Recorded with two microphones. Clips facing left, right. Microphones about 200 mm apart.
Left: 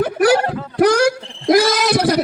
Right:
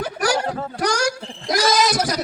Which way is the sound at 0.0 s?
60° left (ahead or behind).